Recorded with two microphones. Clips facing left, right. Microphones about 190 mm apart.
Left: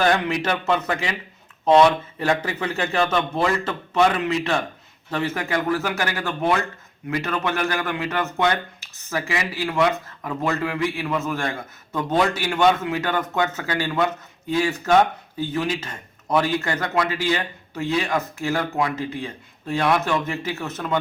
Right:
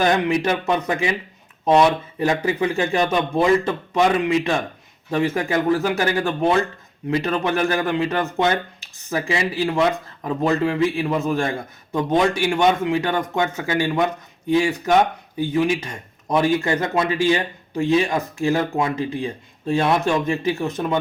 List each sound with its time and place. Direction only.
0.0 s a man's voice: 20° right (ahead or behind)